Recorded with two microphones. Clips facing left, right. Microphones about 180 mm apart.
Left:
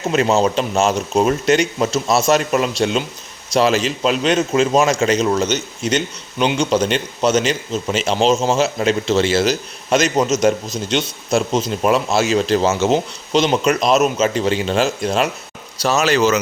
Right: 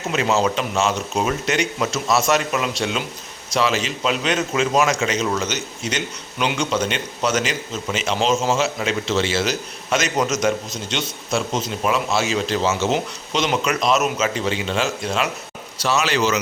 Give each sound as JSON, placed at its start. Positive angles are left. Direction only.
{"t": 0.1, "sound": "speech", "side_deg": 35}
{"t": 10.9, "sound": "speech", "side_deg": 40}